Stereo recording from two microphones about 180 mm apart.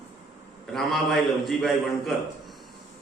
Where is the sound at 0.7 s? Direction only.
Centre (ahead or behind).